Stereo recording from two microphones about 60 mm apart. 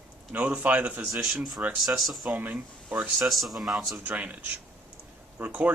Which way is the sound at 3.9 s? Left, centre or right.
Right.